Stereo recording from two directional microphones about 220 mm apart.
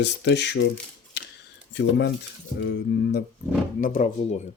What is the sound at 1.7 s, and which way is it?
Speech, 50° left (ahead or behind).